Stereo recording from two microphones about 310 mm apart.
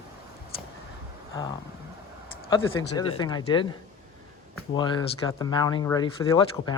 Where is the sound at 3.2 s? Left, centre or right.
Centre.